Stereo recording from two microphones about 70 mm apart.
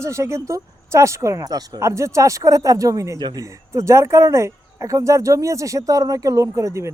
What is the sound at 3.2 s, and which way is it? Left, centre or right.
Speech, right.